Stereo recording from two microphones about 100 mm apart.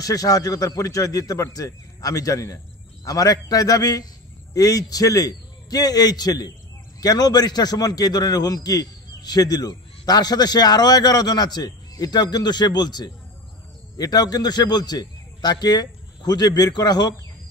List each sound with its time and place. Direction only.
0.0 s a man's voice: 35° left (ahead or behind)